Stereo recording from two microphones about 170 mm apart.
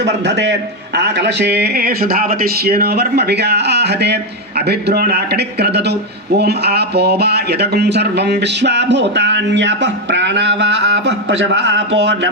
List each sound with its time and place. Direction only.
0.0 s a man's voice: 85° right